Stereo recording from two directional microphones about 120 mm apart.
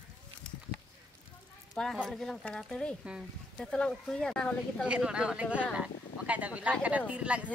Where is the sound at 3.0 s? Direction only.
10° right (ahead or behind).